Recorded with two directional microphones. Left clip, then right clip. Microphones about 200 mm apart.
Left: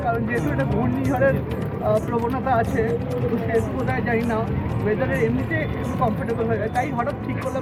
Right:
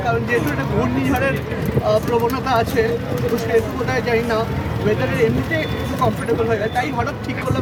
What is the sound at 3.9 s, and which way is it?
Speech, 15° right (ahead or behind).